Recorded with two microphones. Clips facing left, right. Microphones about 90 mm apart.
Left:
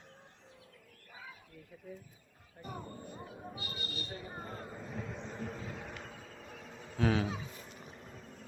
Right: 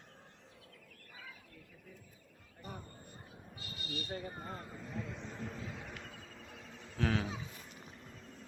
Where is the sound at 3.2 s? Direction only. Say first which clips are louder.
Left 8 dB; 80° left; by 4.0 s 60° left (ahead or behind).